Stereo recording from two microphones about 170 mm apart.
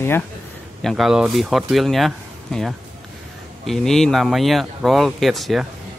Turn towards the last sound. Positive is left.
turn(degrees=0)  # may be behind; listen again after turning